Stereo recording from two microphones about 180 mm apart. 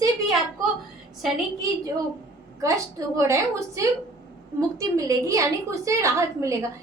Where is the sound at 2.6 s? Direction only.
15° right (ahead or behind).